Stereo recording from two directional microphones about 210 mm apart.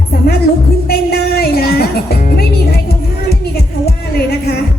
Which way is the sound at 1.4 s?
45° left (ahead or behind).